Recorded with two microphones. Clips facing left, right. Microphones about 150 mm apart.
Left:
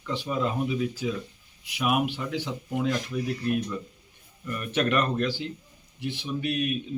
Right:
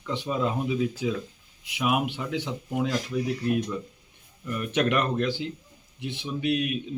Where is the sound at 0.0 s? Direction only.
15° right (ahead or behind).